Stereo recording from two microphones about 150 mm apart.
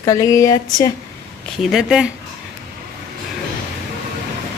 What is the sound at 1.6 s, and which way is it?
Speech, 5° right (ahead or behind).